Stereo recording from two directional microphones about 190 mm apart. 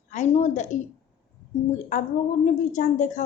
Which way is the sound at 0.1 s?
40° left (ahead or behind).